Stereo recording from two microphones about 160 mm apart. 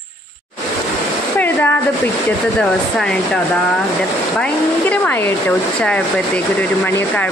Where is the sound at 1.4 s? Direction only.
10° left (ahead or behind).